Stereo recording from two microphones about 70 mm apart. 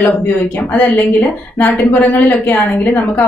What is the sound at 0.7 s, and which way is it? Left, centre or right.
A woman's voice, left.